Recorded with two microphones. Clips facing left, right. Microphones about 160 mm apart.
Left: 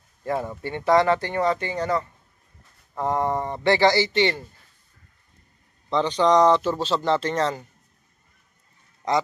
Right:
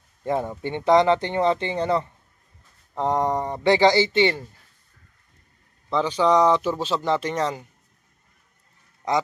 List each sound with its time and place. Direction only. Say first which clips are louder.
0.2 s speech: right 2 dB; 20° right (ahead or behind)
5.9 s speech: even; 5° right (ahead or behind)
9.0 s speech: even; 10° right (ahead or behind)